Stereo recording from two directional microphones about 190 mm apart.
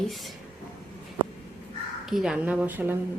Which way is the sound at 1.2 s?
25° right (ahead or behind).